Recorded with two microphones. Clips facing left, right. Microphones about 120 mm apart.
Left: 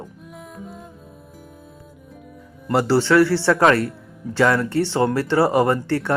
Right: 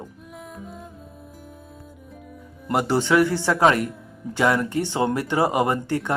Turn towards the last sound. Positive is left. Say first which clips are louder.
# left 3 dB
turn(degrees=-15)  # may be behind; listen again after turning